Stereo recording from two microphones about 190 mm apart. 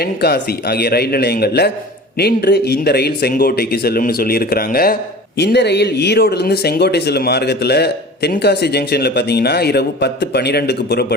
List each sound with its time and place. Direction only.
0.0 s speech: 55° left (ahead or behind)
5.4 s speech: 60° left (ahead or behind)